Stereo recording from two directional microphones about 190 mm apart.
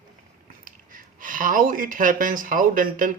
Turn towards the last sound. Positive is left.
turn(degrees=-45)  # may be behind; listen again after turning